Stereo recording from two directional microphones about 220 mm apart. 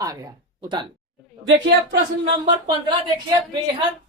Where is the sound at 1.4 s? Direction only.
60° right (ahead or behind).